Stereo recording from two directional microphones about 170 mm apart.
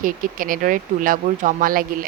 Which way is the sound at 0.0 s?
55° right (ahead or behind).